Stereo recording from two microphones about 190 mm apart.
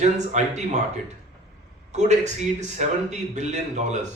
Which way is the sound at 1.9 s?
35° right (ahead or behind).